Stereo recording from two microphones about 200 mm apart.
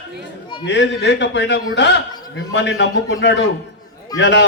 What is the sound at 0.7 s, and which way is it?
A man's voice, 60° left (ahead or behind).